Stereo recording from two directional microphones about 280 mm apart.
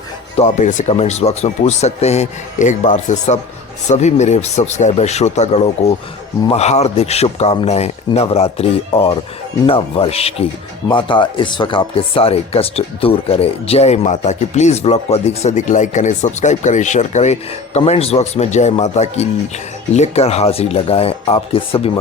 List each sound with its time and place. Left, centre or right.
0.3 s speech: left